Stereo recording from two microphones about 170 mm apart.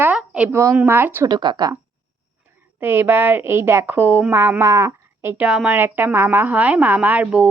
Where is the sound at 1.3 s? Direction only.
25° right (ahead or behind).